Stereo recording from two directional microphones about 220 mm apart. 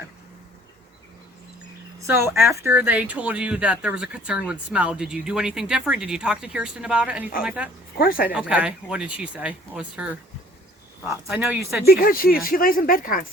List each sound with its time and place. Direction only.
2.0 s a sound: 10° right (ahead or behind)
2.6 s speech: 10° right (ahead or behind)
7.9 s speech: 40° left (ahead or behind)
8.3 s speech: 5° right (ahead or behind)
11.3 s speech: 5° right (ahead or behind)
11.9 s speech: 40° left (ahead or behind)